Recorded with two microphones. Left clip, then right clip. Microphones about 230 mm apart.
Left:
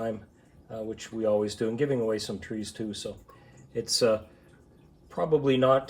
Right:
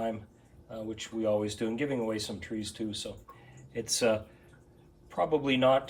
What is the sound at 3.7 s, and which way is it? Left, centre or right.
Speech, centre.